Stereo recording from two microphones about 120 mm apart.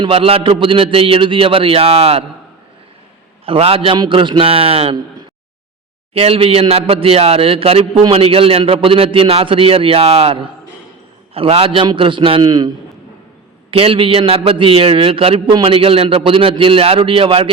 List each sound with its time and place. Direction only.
0.0 s a man's voice: 50° right (ahead or behind)
3.4 s a man's voice: 50° right (ahead or behind)
6.1 s a man's voice: 50° right (ahead or behind); by 12.7 s 35° right (ahead or behind)
13.7 s a man's voice: 50° right (ahead or behind)